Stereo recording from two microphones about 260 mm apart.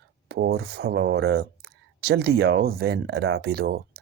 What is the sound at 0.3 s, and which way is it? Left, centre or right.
Speech, right.